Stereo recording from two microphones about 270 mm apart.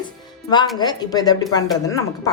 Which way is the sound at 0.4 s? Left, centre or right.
Centre.